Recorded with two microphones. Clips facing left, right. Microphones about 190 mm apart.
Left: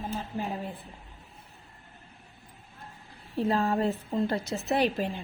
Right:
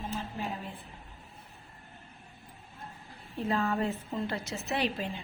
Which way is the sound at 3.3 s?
35° left (ahead or behind).